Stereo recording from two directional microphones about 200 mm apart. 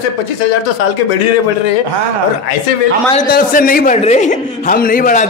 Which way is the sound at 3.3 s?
45° left (ahead or behind).